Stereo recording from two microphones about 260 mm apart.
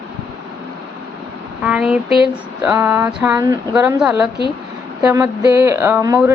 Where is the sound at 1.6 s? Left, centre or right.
Centre.